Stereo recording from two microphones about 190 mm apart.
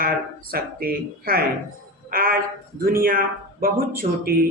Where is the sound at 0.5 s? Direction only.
50° right (ahead or behind).